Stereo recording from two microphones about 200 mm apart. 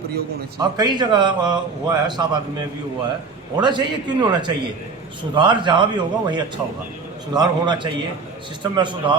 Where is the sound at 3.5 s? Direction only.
20° right (ahead or behind).